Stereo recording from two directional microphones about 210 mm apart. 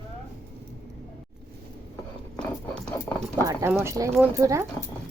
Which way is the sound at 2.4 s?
5° left (ahead or behind).